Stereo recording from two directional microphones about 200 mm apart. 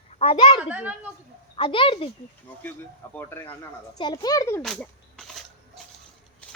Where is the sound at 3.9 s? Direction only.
20° left (ahead or behind).